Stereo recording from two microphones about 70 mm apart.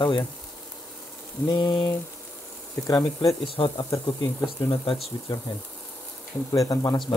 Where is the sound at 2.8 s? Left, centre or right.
Left.